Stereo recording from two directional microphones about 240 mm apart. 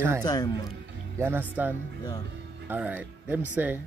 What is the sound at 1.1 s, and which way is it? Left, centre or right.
Speech, centre.